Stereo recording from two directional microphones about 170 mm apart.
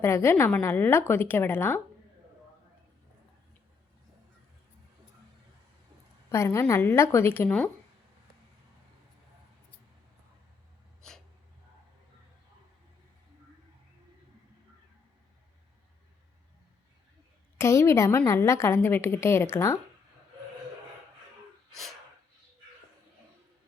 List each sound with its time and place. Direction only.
0.0 s a woman's voice: 15° left (ahead or behind)
6.3 s a woman's voice: 15° left (ahead or behind)
17.6 s a woman's voice: 15° left (ahead or behind)
21.7 s sneeze: centre (ahead or behind)